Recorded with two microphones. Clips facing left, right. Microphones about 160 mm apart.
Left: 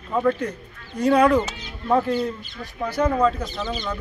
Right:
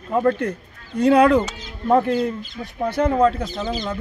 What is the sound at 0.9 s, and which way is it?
Speech, 65° right (ahead or behind).